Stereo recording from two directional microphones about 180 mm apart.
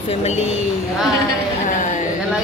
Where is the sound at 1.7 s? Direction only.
45° left (ahead or behind).